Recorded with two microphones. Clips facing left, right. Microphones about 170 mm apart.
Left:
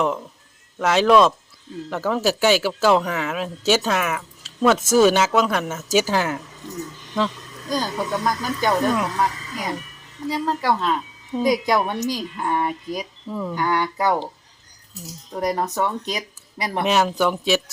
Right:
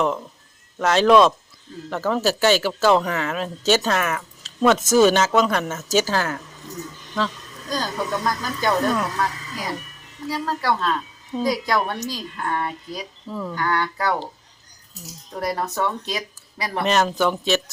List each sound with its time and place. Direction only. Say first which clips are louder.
0.8 s speech: right 1 dB; 5° left (ahead or behind)
7.7 s speech: left 1 dB; 15° left (ahead or behind)
13.2 s speech: left 1 dB; centre (ahead or behind)
13.5 s speech: left 1 dB; 15° left (ahead or behind)
15.4 s speech: left 2 dB; 15° left (ahead or behind)